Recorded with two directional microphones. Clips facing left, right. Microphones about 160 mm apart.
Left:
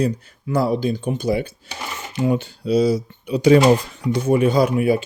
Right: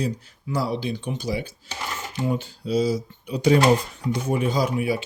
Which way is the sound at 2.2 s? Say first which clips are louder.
Left 6 dB; 75° left (ahead or behind).